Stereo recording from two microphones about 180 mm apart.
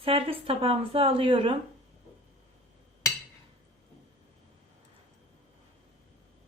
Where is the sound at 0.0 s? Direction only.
30° right (ahead or behind).